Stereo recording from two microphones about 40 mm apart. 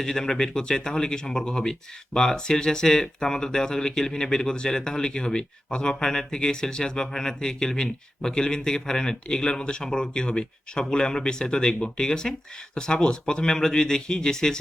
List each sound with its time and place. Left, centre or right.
0.0 s speech: centre